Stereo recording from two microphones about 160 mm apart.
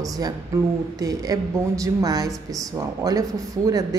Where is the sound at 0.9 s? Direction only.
20° right (ahead or behind).